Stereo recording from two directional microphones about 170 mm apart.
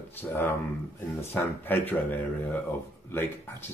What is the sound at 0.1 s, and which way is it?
Speech, 10° left (ahead or behind).